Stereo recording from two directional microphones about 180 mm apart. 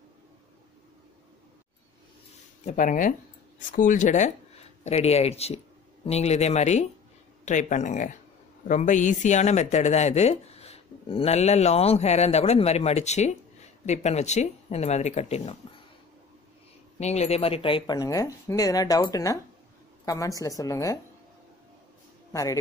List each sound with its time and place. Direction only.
2.6 s speech: 45° left (ahead or behind)
17.0 s speech: 40° left (ahead or behind); by 21.0 s 15° left (ahead or behind)
22.3 s speech: 20° left (ahead or behind)